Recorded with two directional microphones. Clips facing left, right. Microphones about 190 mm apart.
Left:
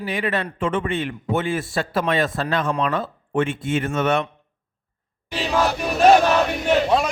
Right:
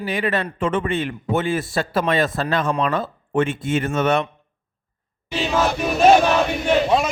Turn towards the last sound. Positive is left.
turn(degrees=0)  # may be behind; listen again after turning